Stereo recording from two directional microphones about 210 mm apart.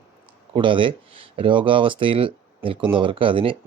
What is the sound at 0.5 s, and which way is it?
Speech, 25° right (ahead or behind).